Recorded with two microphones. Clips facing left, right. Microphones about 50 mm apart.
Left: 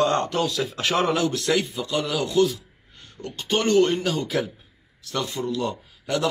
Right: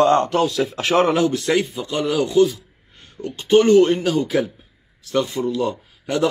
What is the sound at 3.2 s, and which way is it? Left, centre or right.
Speech, centre.